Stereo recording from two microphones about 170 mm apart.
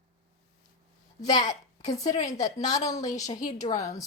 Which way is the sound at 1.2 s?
25° left (ahead or behind).